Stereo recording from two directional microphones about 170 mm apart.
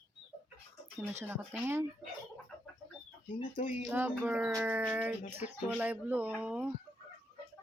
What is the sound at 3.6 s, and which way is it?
Speech, 50° left (ahead or behind).